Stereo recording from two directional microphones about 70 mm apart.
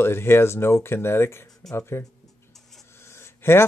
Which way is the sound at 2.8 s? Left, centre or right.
Left.